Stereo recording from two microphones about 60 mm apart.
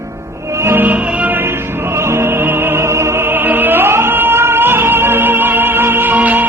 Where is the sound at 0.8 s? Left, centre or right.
Right.